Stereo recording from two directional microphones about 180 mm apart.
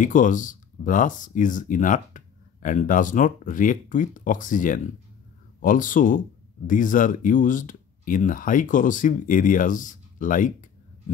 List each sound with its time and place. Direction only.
0.0 s speech: 45° left (ahead or behind)